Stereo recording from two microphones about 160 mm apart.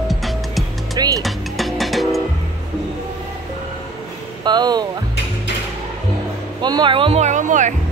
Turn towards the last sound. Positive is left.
turn(degrees=-50)  # may be behind; listen again after turning